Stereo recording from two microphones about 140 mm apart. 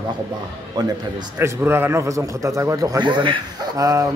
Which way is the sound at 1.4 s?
15° right (ahead or behind).